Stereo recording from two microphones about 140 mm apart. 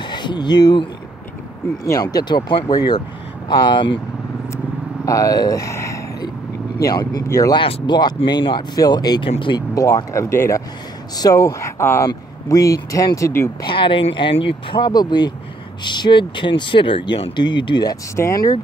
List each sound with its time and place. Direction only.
0.0 s speech: 30° left (ahead or behind)
1.9 s speech: 25° left (ahead or behind)
5.0 s speech: 25° left (ahead or behind)
7.5 s speech: 35° left (ahead or behind)
9.8 s speech: 25° left (ahead or behind)
13.6 s speech: 35° left (ahead or behind)
18.1 s speech: 20° left (ahead or behind)